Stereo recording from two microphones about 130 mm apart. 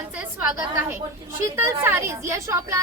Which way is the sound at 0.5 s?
20° right (ahead or behind).